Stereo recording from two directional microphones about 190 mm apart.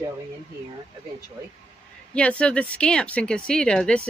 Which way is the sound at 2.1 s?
5° left (ahead or behind).